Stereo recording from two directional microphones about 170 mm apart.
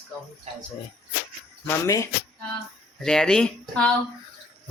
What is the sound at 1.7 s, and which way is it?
Speech, 15° left (ahead or behind).